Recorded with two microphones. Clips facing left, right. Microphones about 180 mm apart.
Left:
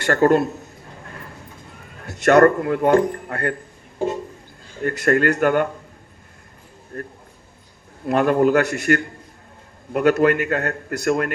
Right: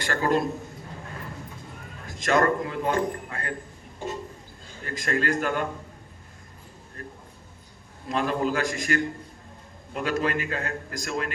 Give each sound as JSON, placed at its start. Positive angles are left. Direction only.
{"t": 0.0, "sound": "a man's voice", "side_deg": 50}
{"t": 2.0, "sound": "a man's voice", "side_deg": 70}
{"t": 4.8, "sound": "a man's voice", "side_deg": 60}
{"t": 6.9, "sound": "a man's voice", "side_deg": 55}